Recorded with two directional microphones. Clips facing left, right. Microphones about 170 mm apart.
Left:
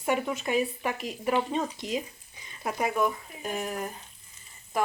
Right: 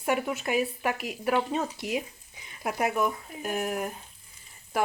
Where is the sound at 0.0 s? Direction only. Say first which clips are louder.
Even; 5° right (ahead or behind).